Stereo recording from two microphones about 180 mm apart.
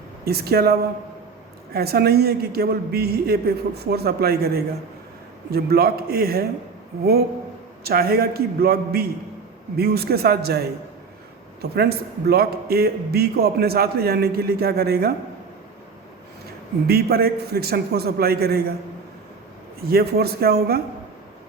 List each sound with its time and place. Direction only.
0.3 s a man's voice: 60° right (ahead or behind)
16.8 s a man's voice: 60° right (ahead or behind)
19.9 s a man's voice: 60° right (ahead or behind)